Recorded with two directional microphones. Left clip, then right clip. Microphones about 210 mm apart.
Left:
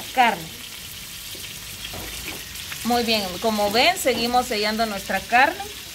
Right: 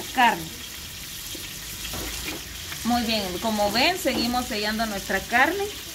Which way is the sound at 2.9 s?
45° left (ahead or behind).